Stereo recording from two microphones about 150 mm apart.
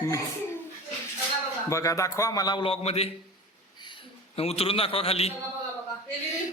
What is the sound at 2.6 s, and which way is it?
A man's voice, 40° left (ahead or behind).